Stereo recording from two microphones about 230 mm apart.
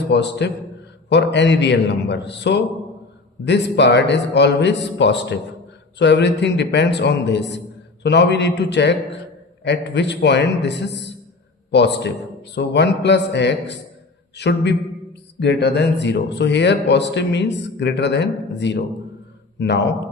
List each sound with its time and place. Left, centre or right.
0.1 s a man's voice: left